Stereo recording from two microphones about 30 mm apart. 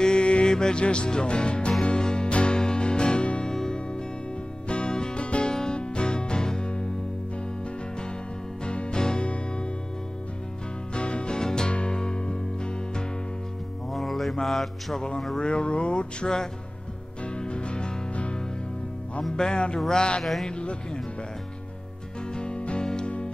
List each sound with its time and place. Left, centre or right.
0.0 s mantra: left
0.5 s music: left
4.6 s music: left
5.2 s music: left
5.5 s music: centre
8.6 s music: left
11.0 s music: left
13.9 s mantra: centre
15.3 s speech: left
17.4 s music: left
19.3 s music: left
22.3 s music: left